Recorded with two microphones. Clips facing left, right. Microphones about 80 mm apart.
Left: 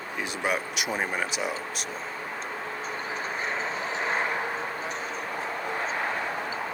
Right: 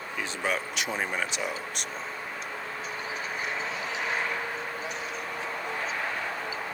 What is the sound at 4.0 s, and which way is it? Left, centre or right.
Vehicle, left.